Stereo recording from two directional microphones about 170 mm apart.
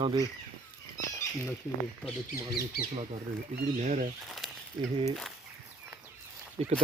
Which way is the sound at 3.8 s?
55° right (ahead or behind).